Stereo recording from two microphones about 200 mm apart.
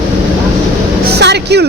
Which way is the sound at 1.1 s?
55° right (ahead or behind).